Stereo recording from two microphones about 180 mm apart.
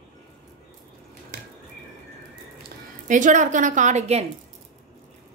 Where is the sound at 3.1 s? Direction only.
45° right (ahead or behind).